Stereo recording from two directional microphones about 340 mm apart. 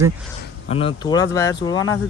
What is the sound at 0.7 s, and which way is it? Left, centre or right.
Speech, centre.